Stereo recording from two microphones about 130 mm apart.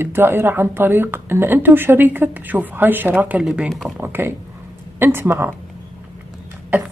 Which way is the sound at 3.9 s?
15° right (ahead or behind).